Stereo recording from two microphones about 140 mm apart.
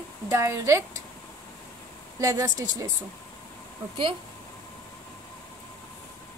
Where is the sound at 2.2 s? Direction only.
25° right (ahead or behind).